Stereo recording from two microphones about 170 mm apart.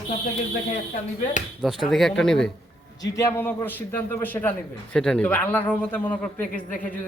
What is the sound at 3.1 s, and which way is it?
A man's voice, 15° left (ahead or behind).